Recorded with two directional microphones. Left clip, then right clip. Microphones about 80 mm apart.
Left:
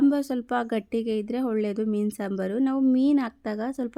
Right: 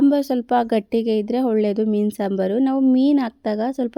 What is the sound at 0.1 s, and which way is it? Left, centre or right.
A woman's voice, right.